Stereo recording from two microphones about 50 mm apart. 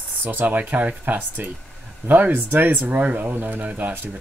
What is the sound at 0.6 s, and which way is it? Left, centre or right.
Speech, right.